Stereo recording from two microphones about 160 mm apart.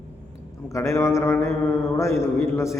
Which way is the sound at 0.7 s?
20° left (ahead or behind).